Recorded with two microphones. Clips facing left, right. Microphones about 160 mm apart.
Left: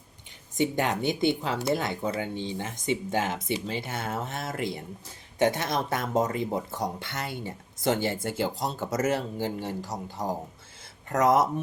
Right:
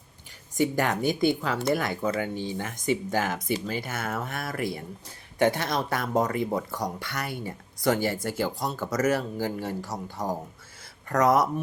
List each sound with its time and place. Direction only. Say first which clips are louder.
0.5 s speech: right 1 dB; 20° left (ahead or behind)